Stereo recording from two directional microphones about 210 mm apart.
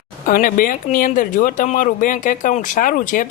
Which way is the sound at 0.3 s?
40° left (ahead or behind).